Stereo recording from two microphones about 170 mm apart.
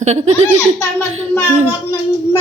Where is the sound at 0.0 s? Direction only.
40° right (ahead or behind).